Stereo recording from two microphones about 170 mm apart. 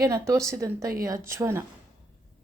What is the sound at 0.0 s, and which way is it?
Speech, 15° right (ahead or behind).